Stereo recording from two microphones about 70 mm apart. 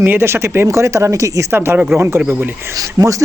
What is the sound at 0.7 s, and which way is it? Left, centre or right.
Speech, right.